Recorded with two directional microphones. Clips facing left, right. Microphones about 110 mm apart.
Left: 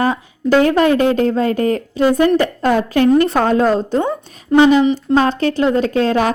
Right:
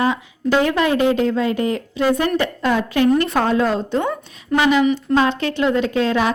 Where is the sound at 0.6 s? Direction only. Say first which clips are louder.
Left 4 dB; 40° left (ahead or behind).